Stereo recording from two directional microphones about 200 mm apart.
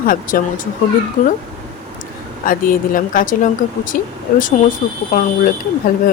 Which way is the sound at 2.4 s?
45° left (ahead or behind).